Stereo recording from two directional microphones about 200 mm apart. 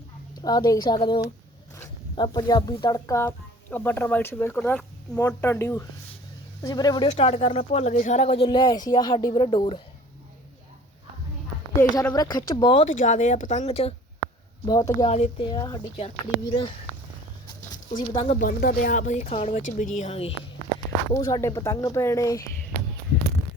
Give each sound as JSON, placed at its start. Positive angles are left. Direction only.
{"t": 0.4, "sound": "speech", "side_deg": 20}
{"t": 11.9, "sound": "speech", "side_deg": 15}
{"t": 12.8, "sound": "speech", "side_deg": 40}
{"t": 15.1, "sound": "speech", "side_deg": 35}
{"t": 15.5, "sound": "speech", "side_deg": 20}
{"t": 17.9, "sound": "speech", "side_deg": 25}
{"t": 18.3, "sound": "speech", "side_deg": 45}
{"t": 21.1, "sound": "speech", "side_deg": 15}